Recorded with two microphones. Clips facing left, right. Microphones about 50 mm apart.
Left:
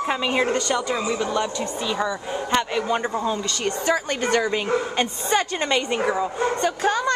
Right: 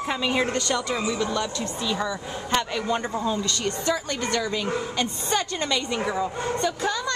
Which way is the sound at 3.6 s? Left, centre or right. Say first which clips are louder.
Left 3 dB; left.